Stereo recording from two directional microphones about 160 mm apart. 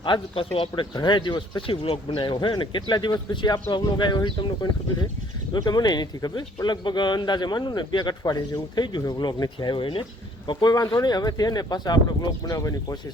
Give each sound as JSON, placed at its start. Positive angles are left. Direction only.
{"t": 0.0, "sound": "speech", "side_deg": 30}